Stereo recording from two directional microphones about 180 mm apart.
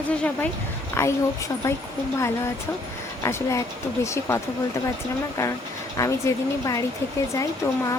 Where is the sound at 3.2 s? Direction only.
15° left (ahead or behind).